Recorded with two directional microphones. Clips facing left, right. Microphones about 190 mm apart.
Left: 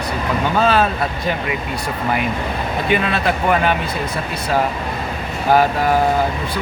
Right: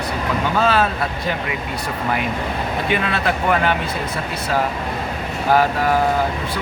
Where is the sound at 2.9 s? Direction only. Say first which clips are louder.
Left 3 dB; 15° left (ahead or behind).